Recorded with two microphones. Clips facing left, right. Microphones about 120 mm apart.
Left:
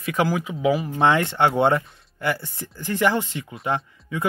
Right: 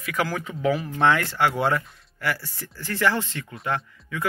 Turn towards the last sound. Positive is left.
turn(degrees=25)  # may be behind; listen again after turning